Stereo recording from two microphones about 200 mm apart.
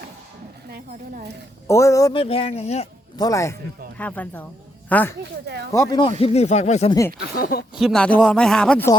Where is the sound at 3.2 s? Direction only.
15° left (ahead or behind).